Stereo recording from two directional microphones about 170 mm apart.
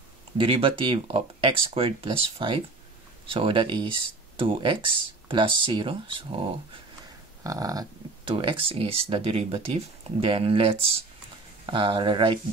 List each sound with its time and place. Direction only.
0.4 s speech: 30° right (ahead or behind)
7.4 s speech: 20° right (ahead or behind)
8.3 s speech: 30° right (ahead or behind)